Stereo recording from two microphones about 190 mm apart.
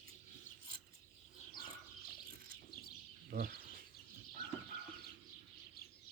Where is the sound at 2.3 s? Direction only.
50° right (ahead or behind).